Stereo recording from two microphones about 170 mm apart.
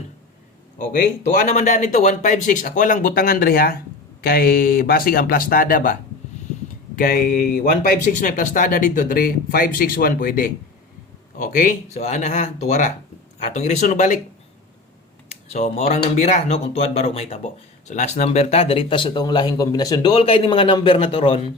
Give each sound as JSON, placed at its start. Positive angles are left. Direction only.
{"t": 1.4, "sound": "speech", "side_deg": 45}
{"t": 15.4, "sound": "speech", "side_deg": 35}